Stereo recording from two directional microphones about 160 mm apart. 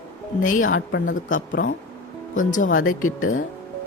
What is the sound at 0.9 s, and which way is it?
Speech, 55° left (ahead or behind).